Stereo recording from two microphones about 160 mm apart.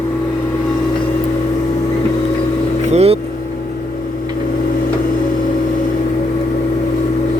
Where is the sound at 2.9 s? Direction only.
40° right (ahead or behind).